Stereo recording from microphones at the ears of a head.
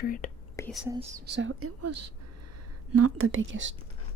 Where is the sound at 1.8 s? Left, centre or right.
Right.